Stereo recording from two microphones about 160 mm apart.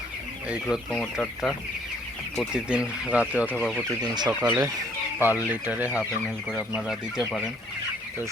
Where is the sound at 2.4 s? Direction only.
5° right (ahead or behind).